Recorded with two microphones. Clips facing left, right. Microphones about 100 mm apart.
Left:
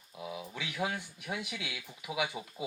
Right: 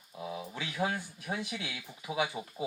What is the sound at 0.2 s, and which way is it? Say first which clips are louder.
Speech: right 2 dB; 35° right (ahead or behind).